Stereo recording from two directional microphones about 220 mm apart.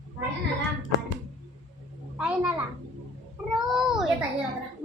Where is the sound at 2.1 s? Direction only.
5° right (ahead or behind).